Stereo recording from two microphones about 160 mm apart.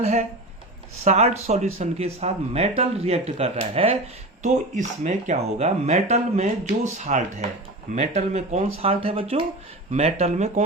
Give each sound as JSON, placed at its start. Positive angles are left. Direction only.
{"t": 0.0, "sound": "speech", "side_deg": -45}